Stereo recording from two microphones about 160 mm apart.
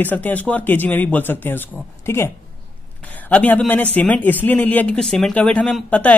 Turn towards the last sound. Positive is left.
turn(degrees=10)  # may be behind; listen again after turning